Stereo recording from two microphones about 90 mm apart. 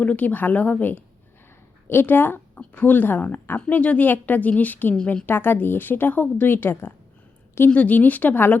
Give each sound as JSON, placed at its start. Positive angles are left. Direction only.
{"t": 0.0, "sound": "speech", "side_deg": 15}
{"t": 5.2, "sound": "speech", "side_deg": 20}